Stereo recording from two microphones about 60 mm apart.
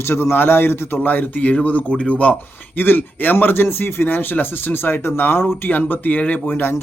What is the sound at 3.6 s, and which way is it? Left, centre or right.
A man's voice, left.